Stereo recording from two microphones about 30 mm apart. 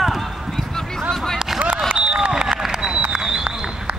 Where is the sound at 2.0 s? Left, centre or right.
Right.